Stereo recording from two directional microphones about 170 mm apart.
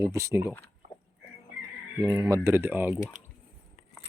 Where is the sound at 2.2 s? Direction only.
20° right (ahead or behind).